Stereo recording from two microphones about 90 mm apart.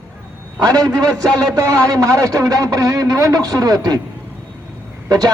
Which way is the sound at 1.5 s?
40° right (ahead or behind).